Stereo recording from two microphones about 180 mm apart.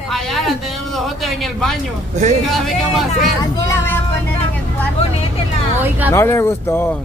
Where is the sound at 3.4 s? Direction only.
15° left (ahead or behind).